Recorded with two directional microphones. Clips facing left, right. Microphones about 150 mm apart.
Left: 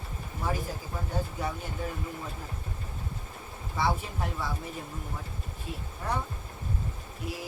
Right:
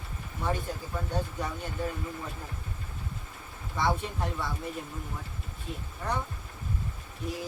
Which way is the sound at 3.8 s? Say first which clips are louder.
Right 1 dB; 5° left (ahead or behind).